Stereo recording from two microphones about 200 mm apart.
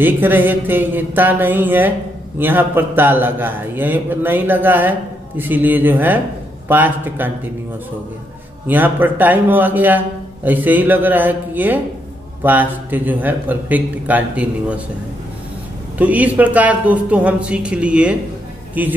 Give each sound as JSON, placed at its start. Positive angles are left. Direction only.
{"t": 0.0, "sound": "speech", "side_deg": -10}
{"t": 8.6, "sound": "speech", "side_deg": -10}
{"t": 16.0, "sound": "speech", "side_deg": -5}